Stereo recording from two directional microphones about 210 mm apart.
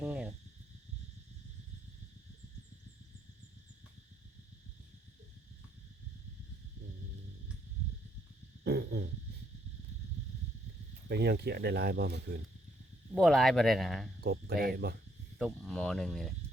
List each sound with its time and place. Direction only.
0.0 s a sound: 5° right (ahead or behind)
8.6 s dog: 50° right (ahead or behind)
11.1 s speech: 50° right (ahead or behind)
13.1 s speech: centre (ahead or behind)
14.2 s speech: 50° right (ahead or behind)
15.4 s speech: centre (ahead or behind)